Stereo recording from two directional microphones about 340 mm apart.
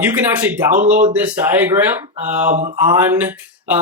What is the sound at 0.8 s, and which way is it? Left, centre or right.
Mantra, right.